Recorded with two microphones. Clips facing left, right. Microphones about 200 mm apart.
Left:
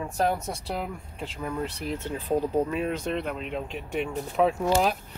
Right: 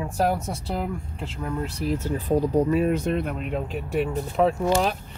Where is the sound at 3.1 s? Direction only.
45° right (ahead or behind).